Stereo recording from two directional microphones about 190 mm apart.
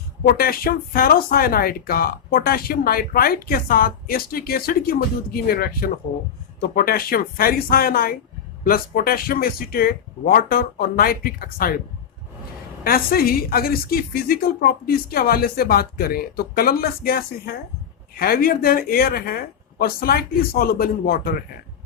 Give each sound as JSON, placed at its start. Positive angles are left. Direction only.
{"t": 0.3, "sound": "speech", "side_deg": 50}
{"t": 12.8, "sound": "speech", "side_deg": 50}